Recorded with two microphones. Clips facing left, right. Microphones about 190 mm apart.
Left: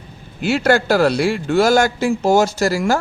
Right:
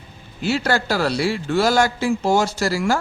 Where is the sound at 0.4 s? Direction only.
50° left (ahead or behind).